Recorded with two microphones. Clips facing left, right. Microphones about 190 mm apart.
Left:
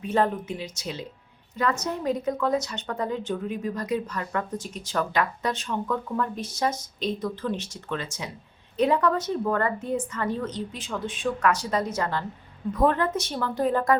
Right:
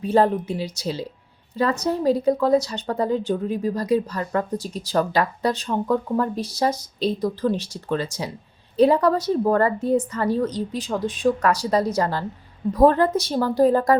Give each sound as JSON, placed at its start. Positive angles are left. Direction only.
{"t": 0.0, "sound": "speech", "side_deg": -35}